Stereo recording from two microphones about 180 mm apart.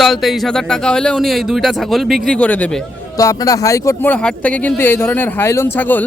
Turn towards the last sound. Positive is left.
turn(degrees=10)  # may be behind; listen again after turning